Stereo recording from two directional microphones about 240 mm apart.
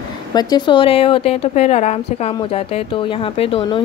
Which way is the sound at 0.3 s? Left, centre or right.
Centre.